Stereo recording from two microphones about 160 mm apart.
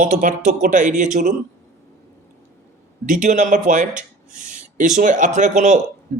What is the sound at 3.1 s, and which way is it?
Speech, 50° right (ahead or behind).